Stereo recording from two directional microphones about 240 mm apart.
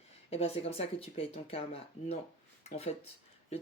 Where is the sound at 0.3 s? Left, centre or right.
Left.